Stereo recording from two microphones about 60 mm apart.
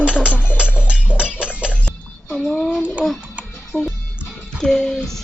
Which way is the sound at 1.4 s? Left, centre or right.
Centre.